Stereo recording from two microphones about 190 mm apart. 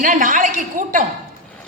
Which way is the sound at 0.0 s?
45° right (ahead or behind).